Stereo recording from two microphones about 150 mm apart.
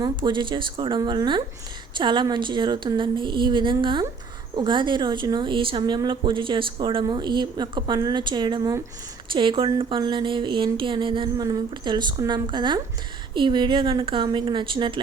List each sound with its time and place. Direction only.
0.0 s speech: 30° right (ahead or behind)